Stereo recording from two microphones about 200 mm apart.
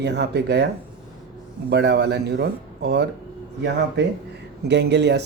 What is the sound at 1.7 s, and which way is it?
Speech, 55° right (ahead or behind).